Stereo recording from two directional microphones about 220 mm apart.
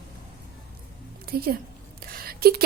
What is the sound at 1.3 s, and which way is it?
Speech, 45° right (ahead or behind).